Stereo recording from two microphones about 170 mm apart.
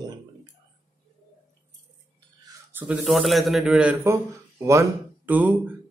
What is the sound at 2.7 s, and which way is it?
A man's voice, 5° right (ahead or behind).